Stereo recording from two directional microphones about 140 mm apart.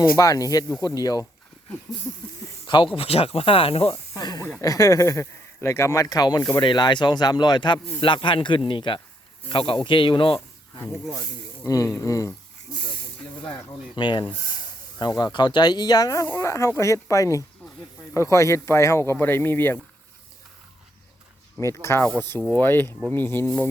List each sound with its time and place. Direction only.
0.2 s speech: 25° left (ahead or behind)
2.6 s speech: 35° left (ahead or behind)
4.2 s snake: 30° left (ahead or behind)
4.6 s speech: 25° left (ahead or behind)
10.8 s speech: 25° left (ahead or behind)
13.5 s speech: 35° left (ahead or behind); by 19.8 s 15° left (ahead or behind)
21.6 s speech: 20° left (ahead or behind)